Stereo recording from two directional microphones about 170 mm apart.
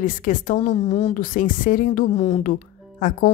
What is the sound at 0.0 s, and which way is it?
Speech, 50° left (ahead or behind).